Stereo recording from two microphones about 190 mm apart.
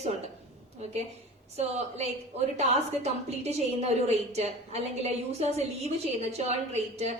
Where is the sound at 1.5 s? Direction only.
35° right (ahead or behind).